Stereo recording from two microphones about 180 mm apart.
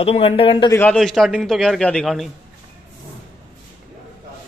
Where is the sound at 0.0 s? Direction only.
35° left (ahead or behind).